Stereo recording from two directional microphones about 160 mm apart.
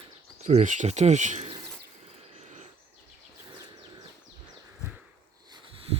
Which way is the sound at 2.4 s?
45° right (ahead or behind).